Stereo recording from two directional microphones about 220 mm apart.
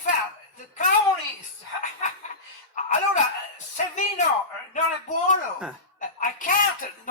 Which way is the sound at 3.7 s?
35° left (ahead or behind).